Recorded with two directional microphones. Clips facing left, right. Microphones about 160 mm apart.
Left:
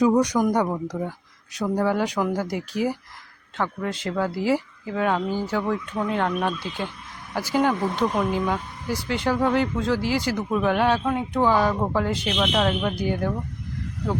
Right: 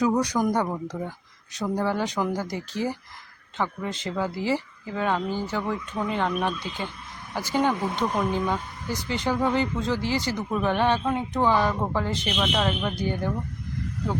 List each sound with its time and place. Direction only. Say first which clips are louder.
0.0 s speech: left 4 dB; 20° left (ahead or behind)
3.6 s speech: left 2 dB; centre (ahead or behind)